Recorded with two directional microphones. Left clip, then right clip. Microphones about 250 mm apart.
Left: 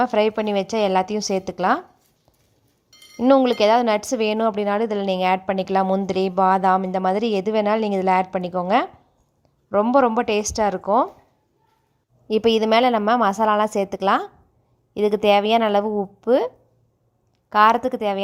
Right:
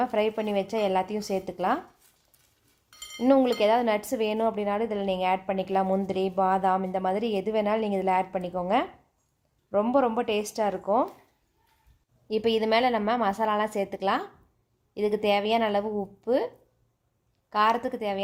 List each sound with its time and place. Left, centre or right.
0.0 s speech: left
3.2 s speech: left
12.3 s speech: left
17.5 s speech: left